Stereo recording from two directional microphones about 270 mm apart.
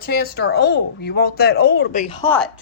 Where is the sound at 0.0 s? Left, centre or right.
Left.